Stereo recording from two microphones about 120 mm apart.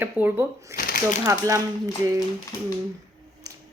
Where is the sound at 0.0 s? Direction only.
15° right (ahead or behind).